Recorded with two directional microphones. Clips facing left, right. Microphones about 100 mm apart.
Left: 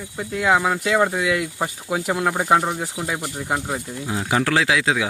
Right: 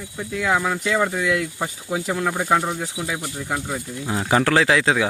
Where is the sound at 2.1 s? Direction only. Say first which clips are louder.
Left 2 dB; 20° left (ahead or behind).